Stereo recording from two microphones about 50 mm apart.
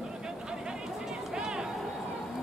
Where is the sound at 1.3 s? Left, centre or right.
Centre.